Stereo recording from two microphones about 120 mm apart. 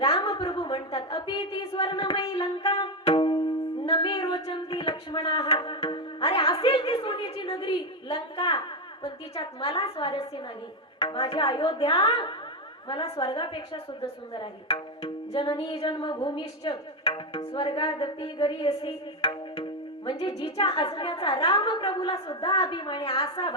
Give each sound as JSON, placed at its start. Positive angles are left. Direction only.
{"t": 0.3, "sound": "a sound", "side_deg": 40}
{"t": 2.4, "sound": "wind instrument", "side_deg": 45}
{"t": 3.0, "sound": "music", "side_deg": 50}
{"t": 7.3, "sound": "a sound", "side_deg": 50}
{"t": 9.3, "sound": "a woman's voice", "side_deg": 55}
{"t": 16.6, "sound": "music", "side_deg": 50}
{"t": 20.1, "sound": "speech", "side_deg": 50}
{"t": 20.9, "sound": "a woman's voice", "side_deg": 40}